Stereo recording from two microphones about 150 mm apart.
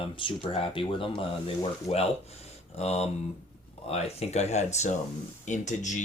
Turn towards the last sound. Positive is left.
turn(degrees=55)  # may be behind; listen again after turning